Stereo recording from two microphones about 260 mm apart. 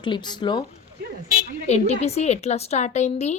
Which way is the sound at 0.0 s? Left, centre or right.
Centre.